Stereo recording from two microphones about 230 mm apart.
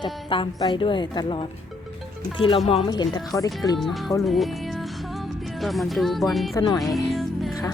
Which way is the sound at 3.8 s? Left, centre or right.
Centre.